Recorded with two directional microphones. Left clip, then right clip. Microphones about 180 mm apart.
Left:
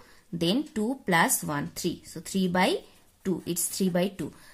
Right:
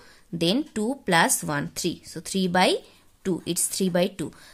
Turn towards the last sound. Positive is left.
turn(degrees=-35)  # may be behind; listen again after turning